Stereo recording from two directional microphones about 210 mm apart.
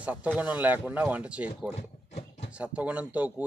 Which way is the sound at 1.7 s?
30° left (ahead or behind).